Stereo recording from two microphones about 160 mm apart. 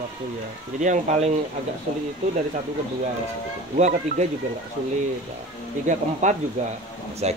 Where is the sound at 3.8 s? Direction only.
45° right (ahead or behind).